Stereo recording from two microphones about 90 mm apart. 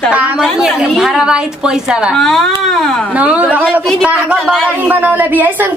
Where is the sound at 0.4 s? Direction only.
5° right (ahead or behind).